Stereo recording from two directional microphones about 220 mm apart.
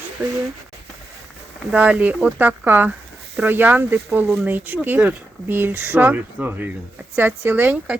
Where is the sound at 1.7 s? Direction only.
5° right (ahead or behind).